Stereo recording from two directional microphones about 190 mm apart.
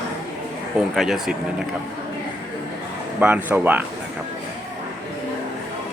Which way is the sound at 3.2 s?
5° right (ahead or behind).